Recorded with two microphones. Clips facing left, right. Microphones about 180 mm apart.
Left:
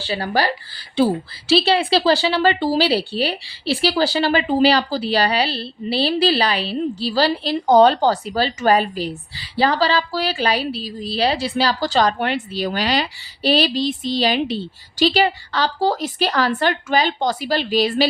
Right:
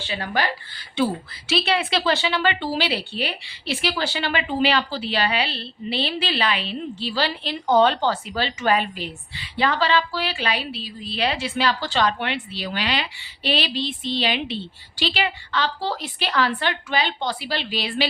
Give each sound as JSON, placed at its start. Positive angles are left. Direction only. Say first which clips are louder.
{"t": 0.0, "sound": "speech", "louder": "left 5 dB", "side_deg": 35}